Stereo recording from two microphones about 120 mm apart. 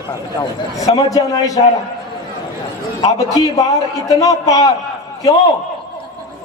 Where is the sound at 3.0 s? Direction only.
30° left (ahead or behind).